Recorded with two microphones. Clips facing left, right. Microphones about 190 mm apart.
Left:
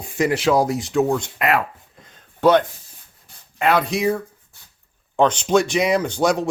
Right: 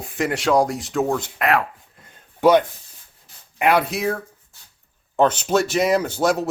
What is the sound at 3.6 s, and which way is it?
Speech, 10° right (ahead or behind).